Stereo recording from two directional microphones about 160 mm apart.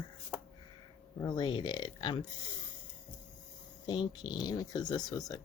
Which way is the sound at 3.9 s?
25° left (ahead or behind).